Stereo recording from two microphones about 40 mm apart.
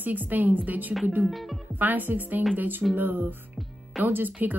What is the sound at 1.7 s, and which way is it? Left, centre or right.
Speech, right.